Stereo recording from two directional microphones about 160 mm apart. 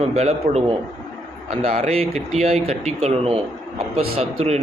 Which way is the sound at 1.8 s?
40° right (ahead or behind).